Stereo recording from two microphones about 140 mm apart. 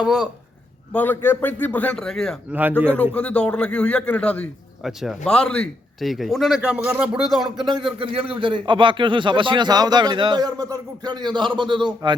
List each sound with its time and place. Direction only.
0.0 s a man's voice: 5° right (ahead or behind)
0.9 s a man's voice: 15° left (ahead or behind)
2.5 s speech: 15° right (ahead or behind)
3.2 s a man's voice: 10° left (ahead or behind); by 6.8 s 5° right (ahead or behind)
6.8 s speech: 20° right (ahead or behind)
7.3 s a man's voice: centre (ahead or behind)
7.7 s a man's voice: 35° right (ahead or behind)